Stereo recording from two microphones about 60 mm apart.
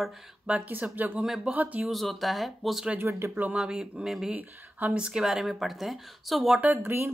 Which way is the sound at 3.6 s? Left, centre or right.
Centre.